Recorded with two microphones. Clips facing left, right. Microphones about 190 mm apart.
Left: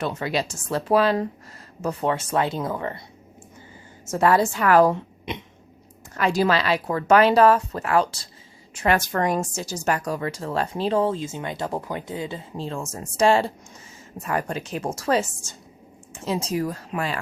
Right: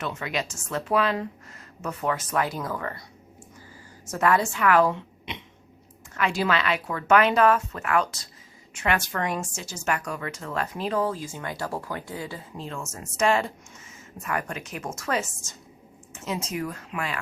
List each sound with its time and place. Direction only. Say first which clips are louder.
0.0 s a woman's voice: left 5 dB; 35° left (ahead or behind)
4.0 s a woman's voice: left 4 dB; 30° left (ahead or behind)